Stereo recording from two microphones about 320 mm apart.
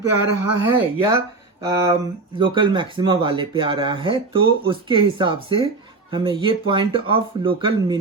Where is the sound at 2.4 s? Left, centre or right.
Centre.